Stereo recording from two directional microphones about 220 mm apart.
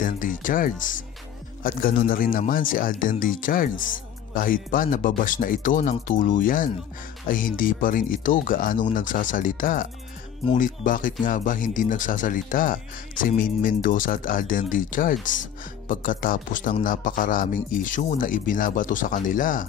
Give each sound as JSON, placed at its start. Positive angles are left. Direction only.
{"t": 0.0, "sound": "a man's voice", "side_deg": 35}